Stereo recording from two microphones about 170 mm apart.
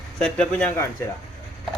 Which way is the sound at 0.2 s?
5° left (ahead or behind).